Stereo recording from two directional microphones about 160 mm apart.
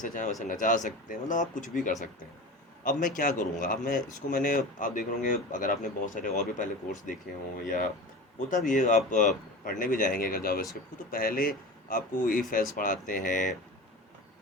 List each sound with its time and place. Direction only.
0.0 s speech: 50° left (ahead or behind)